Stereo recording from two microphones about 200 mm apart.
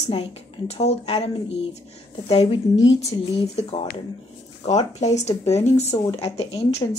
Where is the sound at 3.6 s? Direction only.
30° left (ahead or behind).